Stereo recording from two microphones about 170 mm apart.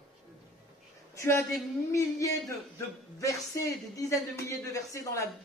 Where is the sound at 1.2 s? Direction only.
15° left (ahead or behind).